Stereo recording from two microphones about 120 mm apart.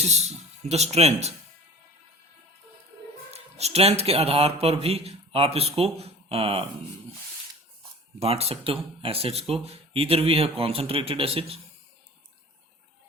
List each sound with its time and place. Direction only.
0.0 s a man's voice: 65° right (ahead or behind)
3.3 s a man's voice: 60° right (ahead or behind)
8.2 s a man's voice: 55° right (ahead or behind)